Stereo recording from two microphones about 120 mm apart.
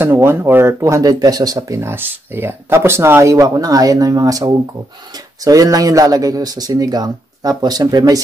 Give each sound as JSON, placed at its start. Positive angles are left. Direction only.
{"t": 0.0, "sound": "speech", "side_deg": -20}